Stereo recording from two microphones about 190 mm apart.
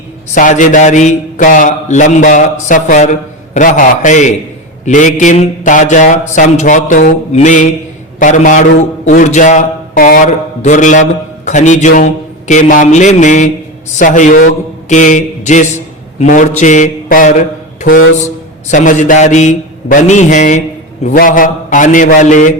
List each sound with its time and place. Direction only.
0.3 s a man's voice: 45° left (ahead or behind)
14.8 s a sound: 40° left (ahead or behind)
16.1 s speech: 40° left (ahead or behind)
18.7 s a man's voice: 40° left (ahead or behind)